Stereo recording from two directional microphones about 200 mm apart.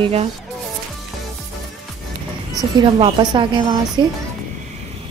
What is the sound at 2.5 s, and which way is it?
A woman's voice, 25° right (ahead or behind).